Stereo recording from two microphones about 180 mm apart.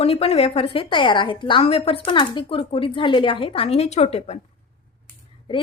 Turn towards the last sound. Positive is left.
turn(degrees=25)  # may be behind; listen again after turning